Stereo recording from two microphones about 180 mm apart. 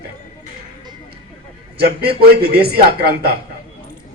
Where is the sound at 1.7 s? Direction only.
60° right (ahead or behind).